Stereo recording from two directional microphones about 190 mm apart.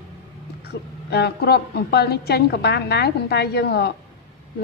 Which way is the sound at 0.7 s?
60° left (ahead or behind).